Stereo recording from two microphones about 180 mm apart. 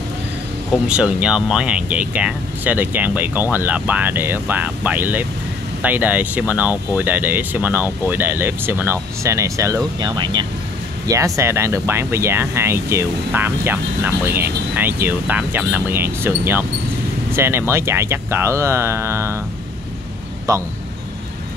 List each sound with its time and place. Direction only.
0.8 s speech: 5° right (ahead or behind)
20.5 s speech: 15° right (ahead or behind)